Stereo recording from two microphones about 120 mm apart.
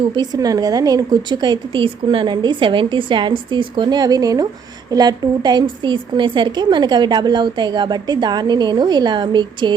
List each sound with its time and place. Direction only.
0.1 s a woman's voice: 35° right (ahead or behind)